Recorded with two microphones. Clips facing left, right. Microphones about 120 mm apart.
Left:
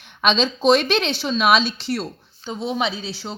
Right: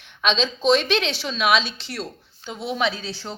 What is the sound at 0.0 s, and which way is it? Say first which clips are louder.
A woman's voice: left 3 dB; 45° left (ahead or behind).